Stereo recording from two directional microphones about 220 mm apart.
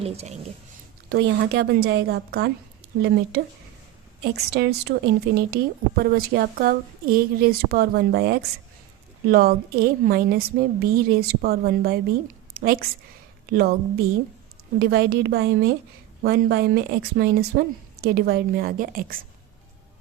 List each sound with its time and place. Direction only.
0.0 s speech: 30° right (ahead or behind)
1.1 s a woman's voice: 50° right (ahead or behind)
4.2 s a woman's voice: 45° right (ahead or behind)